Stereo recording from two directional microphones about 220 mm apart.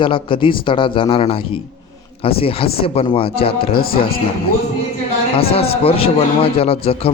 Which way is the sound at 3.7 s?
45° left (ahead or behind).